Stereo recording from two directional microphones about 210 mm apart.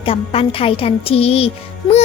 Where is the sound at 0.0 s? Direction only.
25° left (ahead or behind).